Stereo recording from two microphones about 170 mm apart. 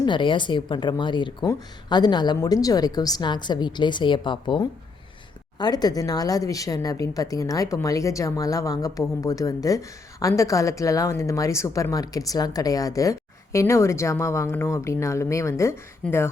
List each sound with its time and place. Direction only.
0.0 s speech: 30° left (ahead or behind)